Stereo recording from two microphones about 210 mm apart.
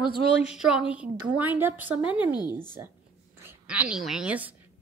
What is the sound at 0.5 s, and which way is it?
A woman's voice, 5° right (ahead or behind).